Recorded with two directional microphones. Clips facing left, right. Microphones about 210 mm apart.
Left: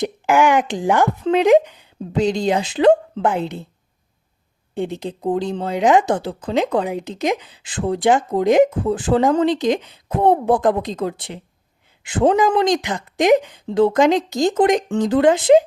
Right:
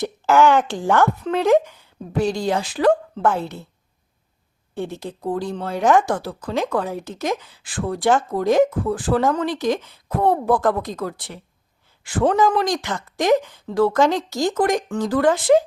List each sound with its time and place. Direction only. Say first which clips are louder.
0.0 s a woman's voice: even; 15° left (ahead or behind)
4.7 s speech: left 4 dB; 15° left (ahead or behind)